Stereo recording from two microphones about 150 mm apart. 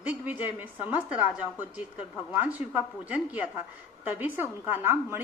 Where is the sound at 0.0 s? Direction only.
10° right (ahead or behind).